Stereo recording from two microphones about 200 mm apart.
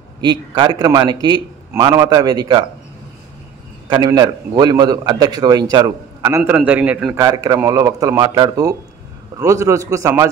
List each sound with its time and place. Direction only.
0.2 s a man's voice: 20° right (ahead or behind)
3.9 s a man's voice: 20° right (ahead or behind)
7.2 s a man's voice: 20° right (ahead or behind)